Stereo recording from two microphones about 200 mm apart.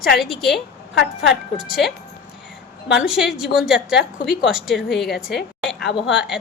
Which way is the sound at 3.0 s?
5° right (ahead or behind).